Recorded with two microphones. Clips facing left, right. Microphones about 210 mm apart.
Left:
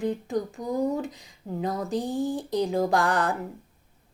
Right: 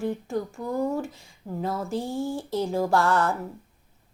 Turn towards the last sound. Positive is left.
turn(degrees=15)  # may be behind; listen again after turning